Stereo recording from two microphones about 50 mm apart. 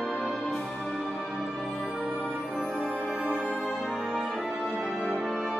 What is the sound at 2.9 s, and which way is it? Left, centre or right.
Music, right.